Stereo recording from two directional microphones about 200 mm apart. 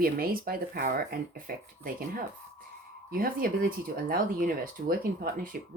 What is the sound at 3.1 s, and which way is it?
Speech, 45° right (ahead or behind).